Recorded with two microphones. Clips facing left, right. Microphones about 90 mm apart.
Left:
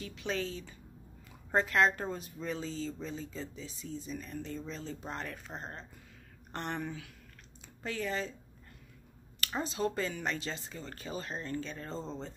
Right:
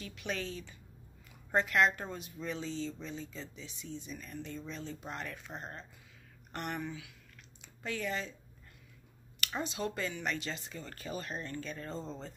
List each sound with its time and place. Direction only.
0.0 s speech: 30° left (ahead or behind)
6.8 s speech: 45° left (ahead or behind)
7.6 s speech: 35° left (ahead or behind)
9.6 s speech: 35° left (ahead or behind)